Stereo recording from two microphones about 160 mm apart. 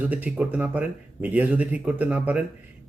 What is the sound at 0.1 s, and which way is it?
A man's voice, 10° right (ahead or behind).